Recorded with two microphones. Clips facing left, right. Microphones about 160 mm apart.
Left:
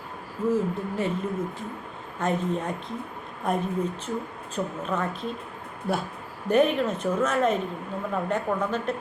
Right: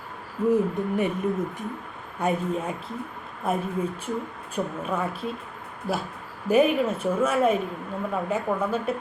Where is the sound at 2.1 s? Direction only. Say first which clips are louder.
Right 1 dB; 10° right (ahead or behind).